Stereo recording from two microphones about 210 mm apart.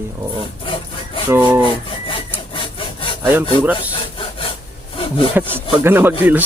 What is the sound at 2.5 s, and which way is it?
Sawing, 25° left (ahead or behind).